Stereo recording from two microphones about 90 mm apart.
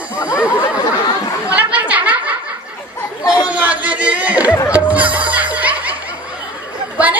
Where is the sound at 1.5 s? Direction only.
15° right (ahead or behind).